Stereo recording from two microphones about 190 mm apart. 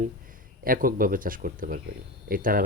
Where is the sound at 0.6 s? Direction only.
50° right (ahead or behind).